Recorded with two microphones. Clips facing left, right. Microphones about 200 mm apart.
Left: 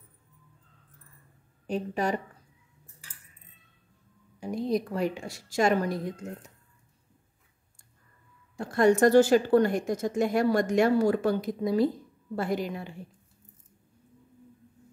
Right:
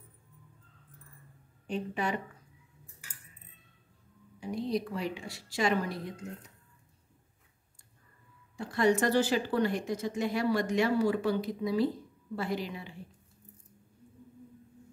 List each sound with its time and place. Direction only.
1.7 s a woman's voice: 40° left (ahead or behind)
4.4 s a woman's voice: 45° left (ahead or behind)
8.5 s a woman's voice: 45° left (ahead or behind)